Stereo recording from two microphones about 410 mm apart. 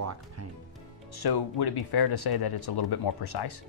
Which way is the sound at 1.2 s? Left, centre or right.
Left.